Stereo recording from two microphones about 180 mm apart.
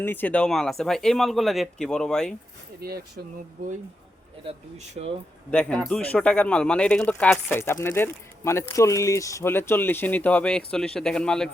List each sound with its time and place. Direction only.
0.0 s speech: 10° left (ahead or behind)
2.8 s speech: 60° right (ahead or behind)
4.9 s speech: 35° right (ahead or behind)
5.5 s speech: 5° left (ahead or behind)